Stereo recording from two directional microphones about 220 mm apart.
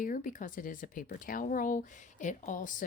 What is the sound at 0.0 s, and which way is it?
Speech, 35° left (ahead or behind).